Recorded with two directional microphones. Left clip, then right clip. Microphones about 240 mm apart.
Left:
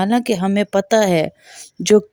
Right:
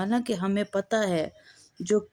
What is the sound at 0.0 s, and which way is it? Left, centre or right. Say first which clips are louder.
Speech: left 10 dB; left.